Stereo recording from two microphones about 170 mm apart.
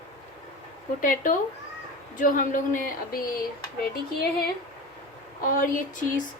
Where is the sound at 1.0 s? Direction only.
50° left (ahead or behind).